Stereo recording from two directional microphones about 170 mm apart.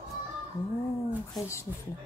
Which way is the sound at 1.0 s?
15° left (ahead or behind).